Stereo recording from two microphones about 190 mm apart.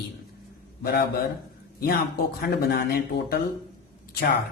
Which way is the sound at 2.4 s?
55° left (ahead or behind).